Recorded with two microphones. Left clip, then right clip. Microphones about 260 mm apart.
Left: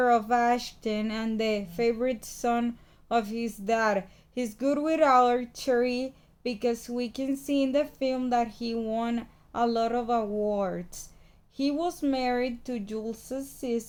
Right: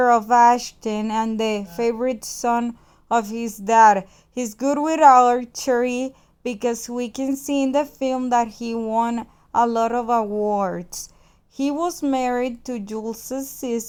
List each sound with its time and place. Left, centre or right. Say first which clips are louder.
0.0 s speech: right 9 dB; right